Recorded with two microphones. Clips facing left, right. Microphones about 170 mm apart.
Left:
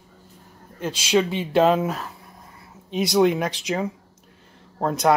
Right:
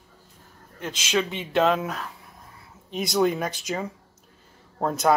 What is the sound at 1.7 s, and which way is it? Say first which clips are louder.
Speech: left 4 dB; 30° left (ahead or behind).